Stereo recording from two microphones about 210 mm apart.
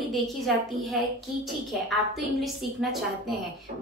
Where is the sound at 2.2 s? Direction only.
Centre (ahead or behind).